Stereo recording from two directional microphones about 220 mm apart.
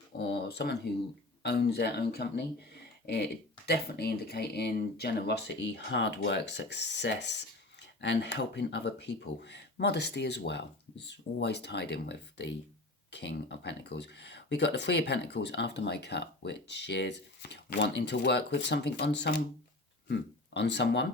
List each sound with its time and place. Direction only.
0.2 s speech: 50° left (ahead or behind)
3.7 s speech: 50° left (ahead or behind)